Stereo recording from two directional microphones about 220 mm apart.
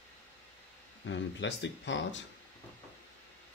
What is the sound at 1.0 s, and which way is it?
Speech, 55° left (ahead or behind).